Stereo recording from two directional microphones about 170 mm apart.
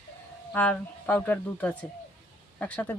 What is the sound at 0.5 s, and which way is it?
Speech, 10° left (ahead or behind).